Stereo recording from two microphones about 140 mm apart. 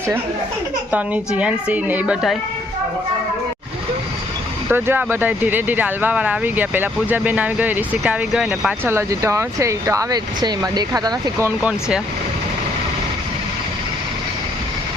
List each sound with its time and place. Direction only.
0.9 s speech: 10° right (ahead or behind)
4.7 s speech: 15° right (ahead or behind)
8.9 s speech: 20° right (ahead or behind)